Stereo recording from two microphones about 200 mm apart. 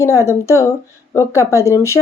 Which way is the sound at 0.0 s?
15° left (ahead or behind).